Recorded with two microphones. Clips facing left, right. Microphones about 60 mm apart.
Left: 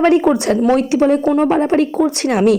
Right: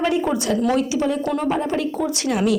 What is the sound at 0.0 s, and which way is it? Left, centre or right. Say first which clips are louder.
A woman's voice: left 8 dB; left.